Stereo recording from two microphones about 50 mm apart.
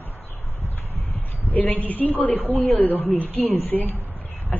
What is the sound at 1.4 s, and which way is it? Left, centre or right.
Speech, left.